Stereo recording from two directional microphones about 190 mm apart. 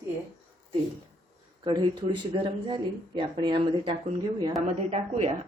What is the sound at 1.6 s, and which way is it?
Speech, 25° right (ahead or behind).